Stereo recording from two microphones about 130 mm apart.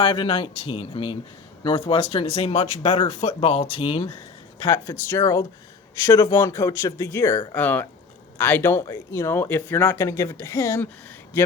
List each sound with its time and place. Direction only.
0.0 s speech: 40° left (ahead or behind)
4.7 s a man's voice: 20° left (ahead or behind)